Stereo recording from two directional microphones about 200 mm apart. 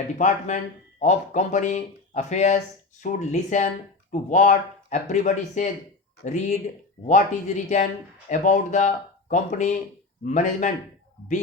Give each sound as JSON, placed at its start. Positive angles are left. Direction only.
{"t": 0.2, "sound": "speech", "side_deg": 35}